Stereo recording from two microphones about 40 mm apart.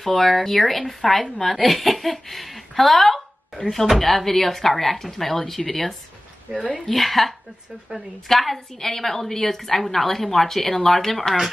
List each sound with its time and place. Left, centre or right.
0.1 s speech: centre
3.5 s speech: centre
3.9 s a woman's voice: centre
6.5 s speech: right
6.9 s a woman's voice: centre